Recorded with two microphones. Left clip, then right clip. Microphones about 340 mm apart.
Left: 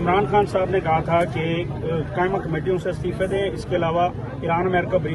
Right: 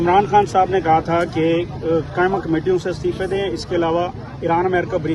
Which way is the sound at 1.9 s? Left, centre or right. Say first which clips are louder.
Right 5 dB; right.